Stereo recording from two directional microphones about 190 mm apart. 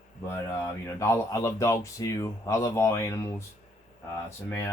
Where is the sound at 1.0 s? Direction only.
15° left (ahead or behind).